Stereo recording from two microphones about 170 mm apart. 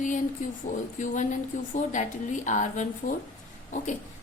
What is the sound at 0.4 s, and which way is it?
A woman's voice, 50° left (ahead or behind).